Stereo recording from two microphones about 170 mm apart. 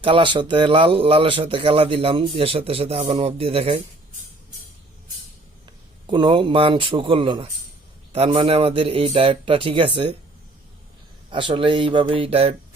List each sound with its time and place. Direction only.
0.0 s speech: 30° right (ahead or behind)
6.1 s a man's voice: 30° right (ahead or behind)
11.3 s speech: 30° right (ahead or behind)